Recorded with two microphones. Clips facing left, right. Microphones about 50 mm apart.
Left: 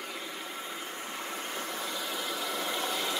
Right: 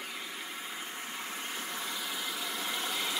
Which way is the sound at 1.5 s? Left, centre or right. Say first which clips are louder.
Left 2 dB; centre.